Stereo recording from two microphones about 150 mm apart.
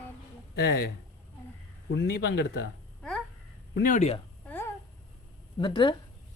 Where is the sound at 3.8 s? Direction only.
60° left (ahead or behind).